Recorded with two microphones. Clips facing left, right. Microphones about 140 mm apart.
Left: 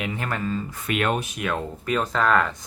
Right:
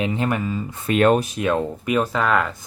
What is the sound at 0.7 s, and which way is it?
Speech, 30° right (ahead or behind).